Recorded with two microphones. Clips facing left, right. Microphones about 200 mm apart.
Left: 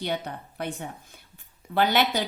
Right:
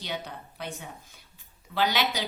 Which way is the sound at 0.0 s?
55° left (ahead or behind).